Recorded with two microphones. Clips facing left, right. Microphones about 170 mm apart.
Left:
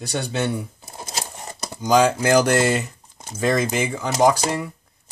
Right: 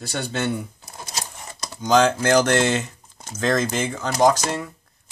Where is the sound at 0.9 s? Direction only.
25° left (ahead or behind).